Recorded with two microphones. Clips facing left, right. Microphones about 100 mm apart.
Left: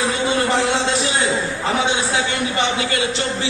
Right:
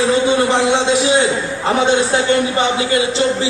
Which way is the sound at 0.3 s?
20° right (ahead or behind).